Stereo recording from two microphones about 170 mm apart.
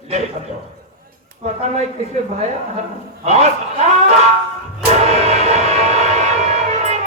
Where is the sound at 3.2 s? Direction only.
40° right (ahead or behind).